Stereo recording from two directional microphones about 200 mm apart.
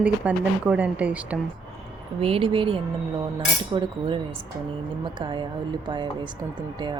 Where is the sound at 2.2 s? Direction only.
25° right (ahead or behind).